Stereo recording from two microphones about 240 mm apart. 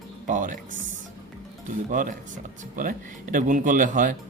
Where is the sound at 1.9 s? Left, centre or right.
Right.